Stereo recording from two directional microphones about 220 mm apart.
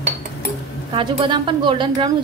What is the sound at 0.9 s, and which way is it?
A woman's voice, 20° right (ahead or behind).